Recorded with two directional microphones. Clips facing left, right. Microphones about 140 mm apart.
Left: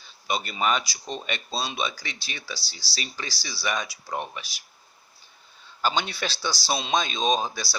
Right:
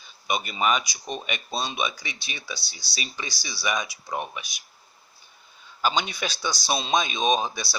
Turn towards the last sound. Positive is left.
turn(degrees=-20)  # may be behind; listen again after turning